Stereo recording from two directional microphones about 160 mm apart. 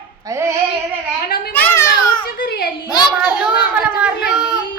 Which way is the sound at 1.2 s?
75° left (ahead or behind).